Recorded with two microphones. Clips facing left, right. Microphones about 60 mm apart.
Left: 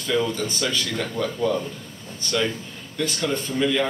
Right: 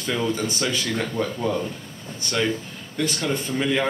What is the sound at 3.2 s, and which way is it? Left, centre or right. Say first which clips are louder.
Speech: left 4 dB; right.